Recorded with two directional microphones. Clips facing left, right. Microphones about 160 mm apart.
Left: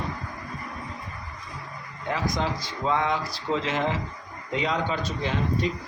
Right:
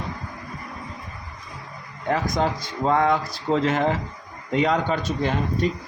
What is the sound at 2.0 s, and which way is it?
Speech, 50° right (ahead or behind).